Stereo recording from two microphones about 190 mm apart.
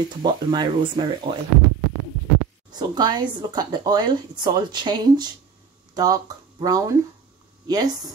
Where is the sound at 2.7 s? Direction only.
20° right (ahead or behind).